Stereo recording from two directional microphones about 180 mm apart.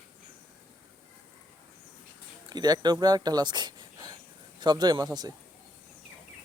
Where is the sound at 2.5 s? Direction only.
20° right (ahead or behind).